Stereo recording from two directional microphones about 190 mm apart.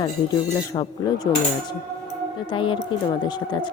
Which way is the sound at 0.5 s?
20° left (ahead or behind).